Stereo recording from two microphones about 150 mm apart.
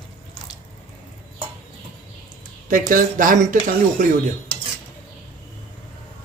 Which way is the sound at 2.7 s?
65° right (ahead or behind).